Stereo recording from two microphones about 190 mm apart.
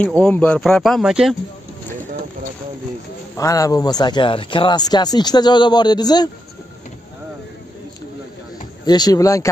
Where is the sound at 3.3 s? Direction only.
15° left (ahead or behind).